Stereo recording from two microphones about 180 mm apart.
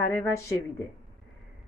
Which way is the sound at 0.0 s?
10° left (ahead or behind).